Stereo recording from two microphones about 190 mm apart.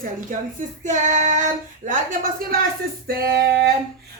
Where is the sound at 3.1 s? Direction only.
55° right (ahead or behind).